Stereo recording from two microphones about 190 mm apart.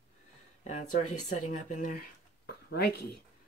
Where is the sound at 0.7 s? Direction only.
40° left (ahead or behind).